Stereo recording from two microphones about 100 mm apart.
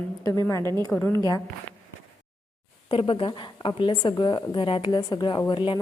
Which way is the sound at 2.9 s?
65° left (ahead or behind).